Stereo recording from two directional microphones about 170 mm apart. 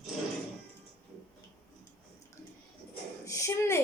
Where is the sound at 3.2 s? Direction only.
20° left (ahead or behind).